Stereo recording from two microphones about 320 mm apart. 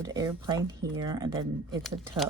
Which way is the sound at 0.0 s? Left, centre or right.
Centre.